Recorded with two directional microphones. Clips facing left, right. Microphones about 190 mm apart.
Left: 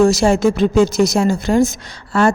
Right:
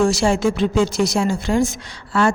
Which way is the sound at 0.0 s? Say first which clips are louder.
Left 4 dB; 40° left (ahead or behind).